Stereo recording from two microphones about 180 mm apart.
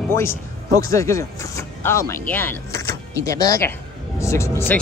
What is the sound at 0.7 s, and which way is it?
A man's voice, 15° left (ahead or behind).